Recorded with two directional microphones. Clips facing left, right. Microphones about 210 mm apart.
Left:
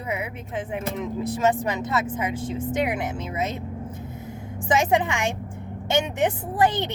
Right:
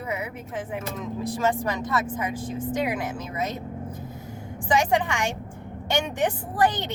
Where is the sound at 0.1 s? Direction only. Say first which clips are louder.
Left 3 dB; 25° left (ahead or behind).